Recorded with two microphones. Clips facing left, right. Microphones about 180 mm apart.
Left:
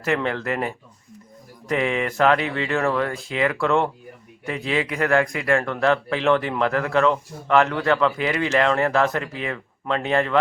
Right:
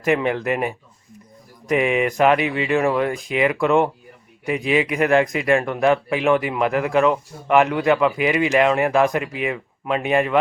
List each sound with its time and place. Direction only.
0.0 s speech: 15° right (ahead or behind)